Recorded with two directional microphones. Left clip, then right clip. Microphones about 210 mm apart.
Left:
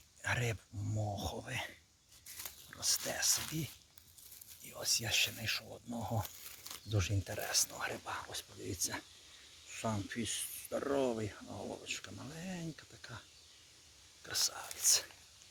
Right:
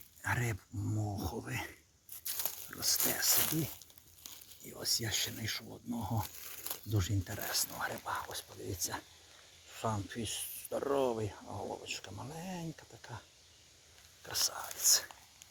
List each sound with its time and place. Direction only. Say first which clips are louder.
0.2 s speech: right 1 dB; 20° left (ahead or behind)
2.6 s a sound: right 1 dB; 20° left (ahead or behind)
3.3 s speech: right 5 dB; 45° right (ahead or behind)
4.7 s speech: left 1 dB; 30° left (ahead or behind); by 13.2 s 15° left (ahead or behind)
14.3 s speech: right 1 dB; 15° left (ahead or behind)